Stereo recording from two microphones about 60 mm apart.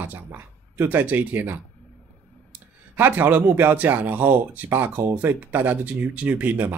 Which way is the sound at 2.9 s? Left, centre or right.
Right.